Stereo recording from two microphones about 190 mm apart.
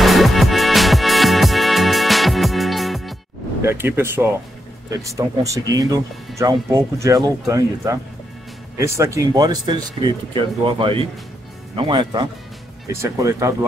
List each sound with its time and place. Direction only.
0.0 s music: centre (ahead or behind)
3.6 s speech: 10° right (ahead or behind)